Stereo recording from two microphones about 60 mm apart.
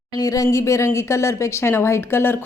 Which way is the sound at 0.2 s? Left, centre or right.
Left.